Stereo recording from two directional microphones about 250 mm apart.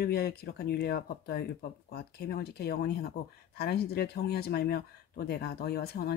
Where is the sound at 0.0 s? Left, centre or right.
Left.